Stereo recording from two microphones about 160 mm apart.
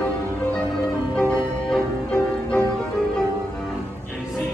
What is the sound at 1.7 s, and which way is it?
Music, 10° left (ahead or behind).